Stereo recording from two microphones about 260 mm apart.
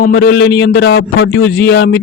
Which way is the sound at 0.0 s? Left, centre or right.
Left.